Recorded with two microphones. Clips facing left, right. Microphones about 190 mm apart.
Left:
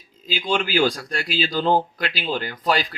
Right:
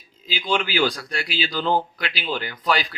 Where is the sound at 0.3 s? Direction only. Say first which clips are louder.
Left 2 dB; 40° left (ahead or behind).